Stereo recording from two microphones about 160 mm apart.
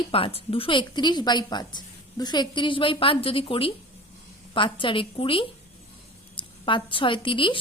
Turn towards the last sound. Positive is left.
turn(degrees=30)  # may be behind; listen again after turning